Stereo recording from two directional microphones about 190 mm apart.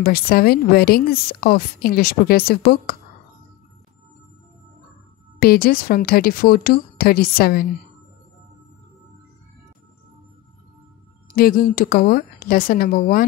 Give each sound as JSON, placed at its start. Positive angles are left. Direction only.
{"t": 0.0, "sound": "a woman's voice", "side_deg": 50}
{"t": 5.4, "sound": "a woman's voice", "side_deg": 50}
{"t": 11.3, "sound": "a woman's voice", "side_deg": 50}